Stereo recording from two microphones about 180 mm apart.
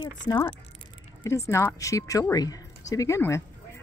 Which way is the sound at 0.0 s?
20° left (ahead or behind).